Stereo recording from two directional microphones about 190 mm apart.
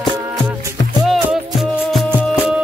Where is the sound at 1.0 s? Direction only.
Centre (ahead or behind).